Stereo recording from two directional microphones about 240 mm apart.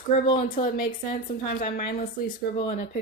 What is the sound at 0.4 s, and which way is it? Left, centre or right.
Speech, left.